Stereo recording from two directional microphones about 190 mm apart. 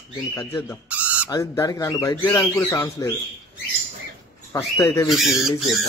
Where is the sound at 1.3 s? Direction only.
15° left (ahead or behind).